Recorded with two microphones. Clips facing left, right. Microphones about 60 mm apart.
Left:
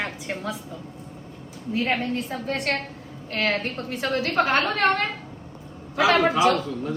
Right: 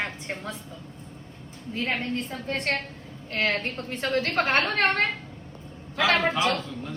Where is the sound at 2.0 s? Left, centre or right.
Right.